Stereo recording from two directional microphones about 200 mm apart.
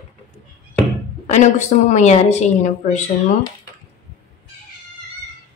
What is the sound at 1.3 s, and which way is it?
A woman's voice, 35° left (ahead or behind).